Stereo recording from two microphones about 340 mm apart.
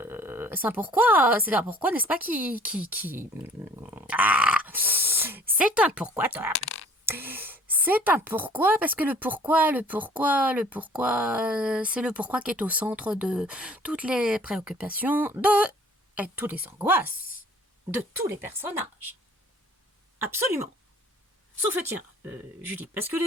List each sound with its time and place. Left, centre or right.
0.0 s a woman's voice: centre
6.6 s whispering: left
7.0 s a woman's voice: centre
20.1 s a woman's voice: centre
21.8 s a woman's voice: centre